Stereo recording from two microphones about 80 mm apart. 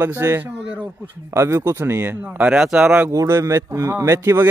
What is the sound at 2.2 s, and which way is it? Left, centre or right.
Speech, centre.